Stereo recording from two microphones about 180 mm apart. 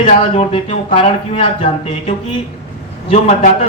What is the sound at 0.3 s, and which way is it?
Speech, 30° left (ahead or behind).